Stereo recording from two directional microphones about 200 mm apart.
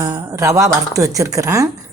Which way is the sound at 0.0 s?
15° right (ahead or behind).